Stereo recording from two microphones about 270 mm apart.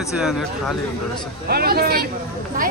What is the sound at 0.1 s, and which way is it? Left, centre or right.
Speech, centre.